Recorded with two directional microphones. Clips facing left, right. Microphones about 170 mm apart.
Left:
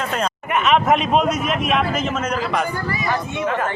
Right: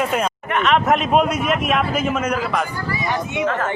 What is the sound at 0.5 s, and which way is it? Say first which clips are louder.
A man's voice: left 1 dB; centre (ahead or behind).